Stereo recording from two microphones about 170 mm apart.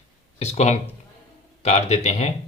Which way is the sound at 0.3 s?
40° left (ahead or behind).